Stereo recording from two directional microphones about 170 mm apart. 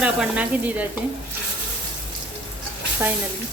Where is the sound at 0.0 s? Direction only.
5° right (ahead or behind).